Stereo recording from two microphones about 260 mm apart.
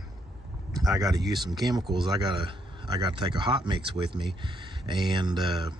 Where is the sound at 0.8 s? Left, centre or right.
Centre.